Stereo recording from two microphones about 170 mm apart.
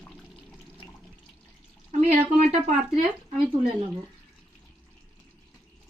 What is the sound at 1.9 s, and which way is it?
Speech, 40° right (ahead or behind).